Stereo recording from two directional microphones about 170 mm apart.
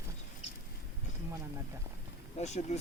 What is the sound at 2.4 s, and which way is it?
Speech, 40° left (ahead or behind).